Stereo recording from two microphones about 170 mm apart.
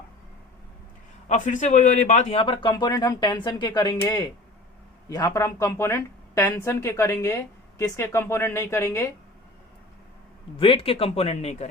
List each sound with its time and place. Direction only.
1.3 s a man's voice: 45° left (ahead or behind); by 9.0 s 15° left (ahead or behind)
10.6 s speech: 35° left (ahead or behind)